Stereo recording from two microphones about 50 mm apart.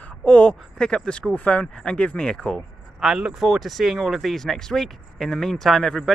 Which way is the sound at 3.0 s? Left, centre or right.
Centre.